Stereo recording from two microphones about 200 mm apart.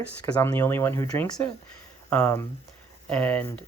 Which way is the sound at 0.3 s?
10° left (ahead or behind).